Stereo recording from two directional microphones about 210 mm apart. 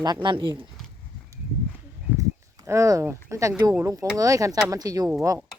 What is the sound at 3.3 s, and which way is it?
Speech, 15° right (ahead or behind).